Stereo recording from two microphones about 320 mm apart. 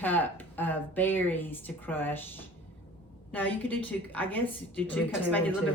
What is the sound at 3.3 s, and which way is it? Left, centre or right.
Speech, centre.